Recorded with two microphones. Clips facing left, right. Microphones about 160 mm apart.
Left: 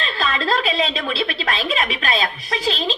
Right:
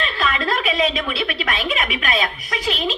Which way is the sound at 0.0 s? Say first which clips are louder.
Right 1 dB; 30° left (ahead or behind).